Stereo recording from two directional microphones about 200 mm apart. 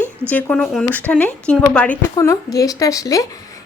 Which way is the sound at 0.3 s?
10° left (ahead or behind).